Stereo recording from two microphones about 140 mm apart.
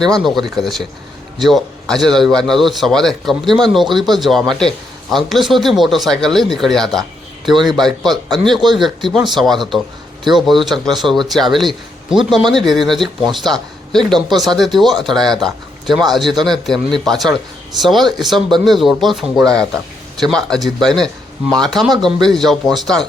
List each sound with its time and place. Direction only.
0.0 s a man's voice: 5° left (ahead or behind)